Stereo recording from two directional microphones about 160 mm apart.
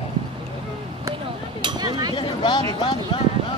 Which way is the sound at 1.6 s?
25° right (ahead or behind).